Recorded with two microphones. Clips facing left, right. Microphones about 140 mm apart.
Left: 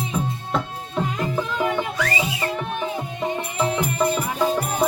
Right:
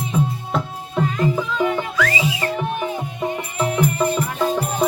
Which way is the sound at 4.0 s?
10° left (ahead or behind).